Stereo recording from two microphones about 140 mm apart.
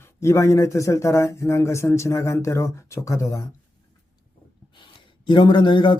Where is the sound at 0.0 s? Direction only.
20° left (ahead or behind).